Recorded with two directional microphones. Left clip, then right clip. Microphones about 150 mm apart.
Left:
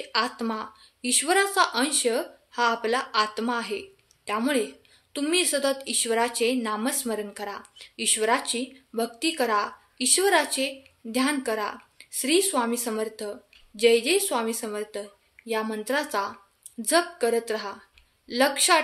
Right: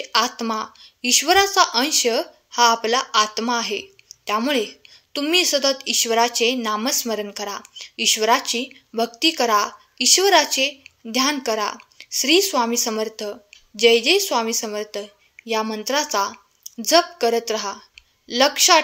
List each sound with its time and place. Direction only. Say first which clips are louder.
0.0 s a woman's voice: right 6 dB; 30° right (ahead or behind)